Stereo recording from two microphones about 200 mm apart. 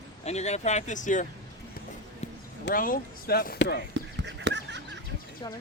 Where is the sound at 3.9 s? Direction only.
60° right (ahead or behind).